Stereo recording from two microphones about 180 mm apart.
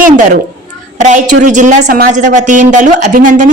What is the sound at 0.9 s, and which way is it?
A woman's voice, 45° right (ahead or behind).